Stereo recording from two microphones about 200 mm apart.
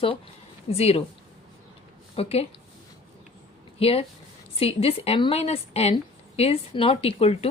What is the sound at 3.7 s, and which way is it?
A woman's voice, 30° left (ahead or behind).